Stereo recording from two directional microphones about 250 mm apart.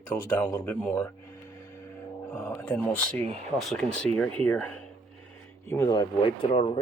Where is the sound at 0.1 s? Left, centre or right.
Centre.